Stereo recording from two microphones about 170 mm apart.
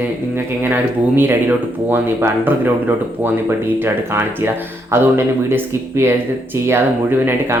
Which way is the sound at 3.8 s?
15° right (ahead or behind).